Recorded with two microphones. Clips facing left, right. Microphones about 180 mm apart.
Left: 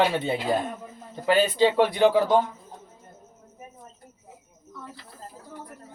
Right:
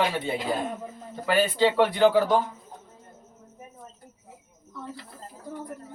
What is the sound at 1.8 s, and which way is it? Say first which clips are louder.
Speech: right 1 dB; 15° left (ahead or behind).